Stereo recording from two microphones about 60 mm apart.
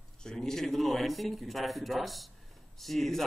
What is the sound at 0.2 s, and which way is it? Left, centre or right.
A man's voice, centre.